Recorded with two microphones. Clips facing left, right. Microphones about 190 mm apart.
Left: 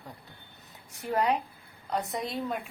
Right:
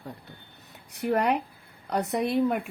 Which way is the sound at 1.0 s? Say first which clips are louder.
Right 3 dB; 65° right (ahead or behind).